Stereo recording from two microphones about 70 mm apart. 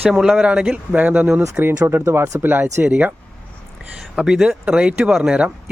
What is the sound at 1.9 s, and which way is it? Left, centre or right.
Speech, right.